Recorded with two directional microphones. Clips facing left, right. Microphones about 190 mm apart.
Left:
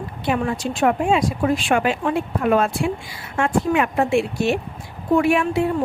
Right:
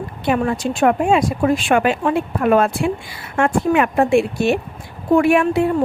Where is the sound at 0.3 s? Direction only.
50° right (ahead or behind).